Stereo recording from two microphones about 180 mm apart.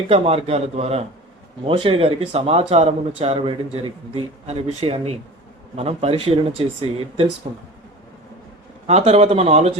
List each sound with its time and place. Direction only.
0.1 s speech: 35° right (ahead or behind)
8.9 s speech: 35° right (ahead or behind)